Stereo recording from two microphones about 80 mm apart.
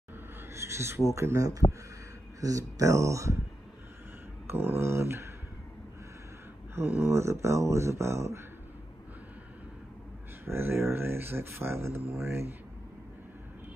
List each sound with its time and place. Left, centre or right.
0.5 s speech: right
4.5 s speech: right
6.7 s speech: right
10.4 s speech: right